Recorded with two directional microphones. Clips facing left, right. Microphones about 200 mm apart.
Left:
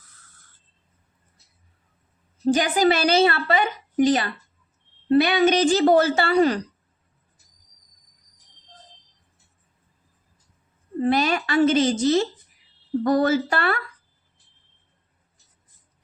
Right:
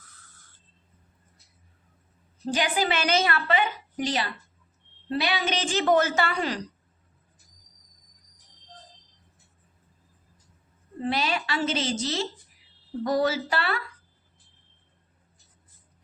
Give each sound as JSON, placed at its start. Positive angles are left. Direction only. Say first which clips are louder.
{"t": 2.5, "sound": "a woman's voice", "louder": "left 7 dB", "side_deg": 45}
{"t": 11.0, "sound": "a woman's voice", "louder": "left 6 dB", "side_deg": 50}